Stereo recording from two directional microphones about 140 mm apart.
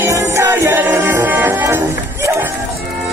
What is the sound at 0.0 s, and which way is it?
Music, 20° right (ahead or behind).